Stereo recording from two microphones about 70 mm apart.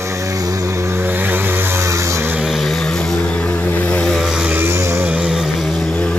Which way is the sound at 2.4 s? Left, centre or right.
Centre.